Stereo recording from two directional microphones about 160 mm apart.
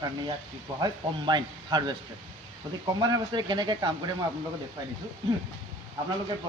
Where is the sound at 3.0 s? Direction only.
25° right (ahead or behind).